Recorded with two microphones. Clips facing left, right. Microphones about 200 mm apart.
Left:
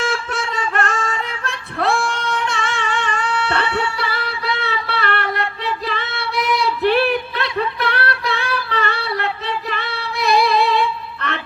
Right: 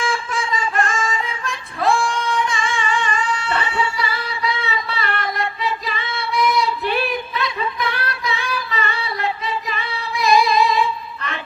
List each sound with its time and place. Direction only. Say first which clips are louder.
0.0 s female singing: left 1 dB; 65° left (ahead or behind)